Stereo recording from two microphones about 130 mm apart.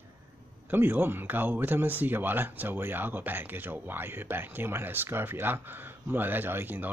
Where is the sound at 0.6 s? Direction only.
15° right (ahead or behind).